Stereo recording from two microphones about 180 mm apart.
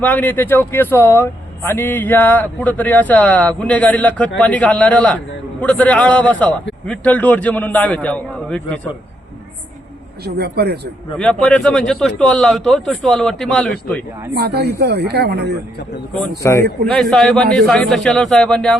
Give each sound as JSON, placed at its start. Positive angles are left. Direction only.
{"t": 0.0, "sound": "speech", "side_deg": 10}
{"t": 10.2, "sound": "speech", "side_deg": -60}
{"t": 11.2, "sound": "a man's voice", "side_deg": 5}
{"t": 14.3, "sound": "speech", "side_deg": -65}
{"t": 16.4, "sound": "speech", "side_deg": 15}
{"t": 16.9, "sound": "a man's voice", "side_deg": 0}